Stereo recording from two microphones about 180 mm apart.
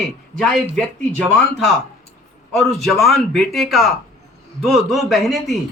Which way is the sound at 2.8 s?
Centre (ahead or behind).